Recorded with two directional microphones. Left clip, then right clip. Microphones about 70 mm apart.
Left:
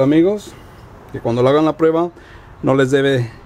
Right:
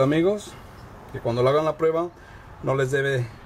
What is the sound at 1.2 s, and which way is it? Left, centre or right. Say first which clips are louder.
Speech: left 7 dB; left.